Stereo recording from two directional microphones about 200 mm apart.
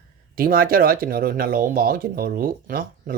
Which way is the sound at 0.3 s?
45° right (ahead or behind).